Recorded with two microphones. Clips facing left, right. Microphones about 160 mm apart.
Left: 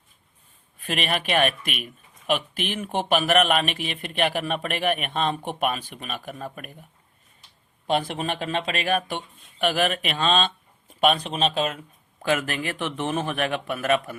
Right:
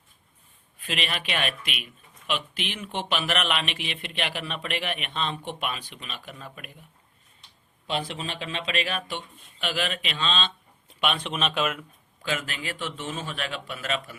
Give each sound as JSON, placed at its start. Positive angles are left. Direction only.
{"t": 0.9, "sound": "speech", "side_deg": 50}
{"t": 7.9, "sound": "speech", "side_deg": 50}
{"t": 12.2, "sound": "a man's voice", "side_deg": 55}